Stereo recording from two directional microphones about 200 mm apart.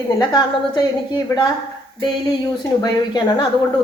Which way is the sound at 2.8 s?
20° left (ahead or behind).